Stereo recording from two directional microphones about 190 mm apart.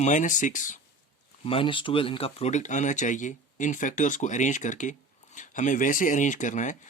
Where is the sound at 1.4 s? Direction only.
30° left (ahead or behind).